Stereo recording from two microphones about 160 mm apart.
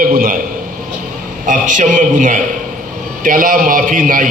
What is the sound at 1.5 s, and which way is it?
A man's voice, 55° right (ahead or behind).